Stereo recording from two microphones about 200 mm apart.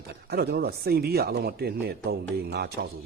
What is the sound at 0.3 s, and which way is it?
A man's voice, 55° right (ahead or behind).